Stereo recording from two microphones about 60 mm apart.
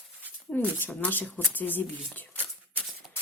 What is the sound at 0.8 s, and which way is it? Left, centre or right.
Speech, left.